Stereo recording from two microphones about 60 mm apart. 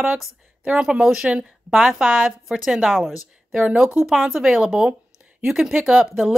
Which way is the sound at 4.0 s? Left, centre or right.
Centre.